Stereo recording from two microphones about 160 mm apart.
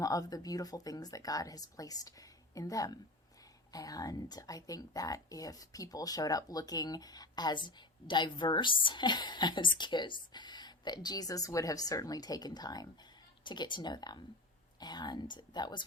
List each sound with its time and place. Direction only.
0.0 s speech: 20° left (ahead or behind)